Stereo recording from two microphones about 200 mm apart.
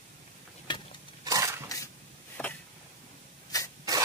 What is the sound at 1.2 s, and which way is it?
Crushing, 15° right (ahead or behind).